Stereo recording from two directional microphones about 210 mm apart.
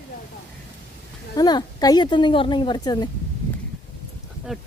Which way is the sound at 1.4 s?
20° left (ahead or behind).